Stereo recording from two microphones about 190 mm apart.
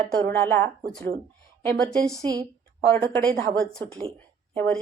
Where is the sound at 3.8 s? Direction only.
25° right (ahead or behind).